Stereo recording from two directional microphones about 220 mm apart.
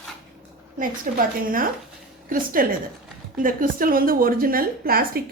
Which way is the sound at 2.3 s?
40° right (ahead or behind).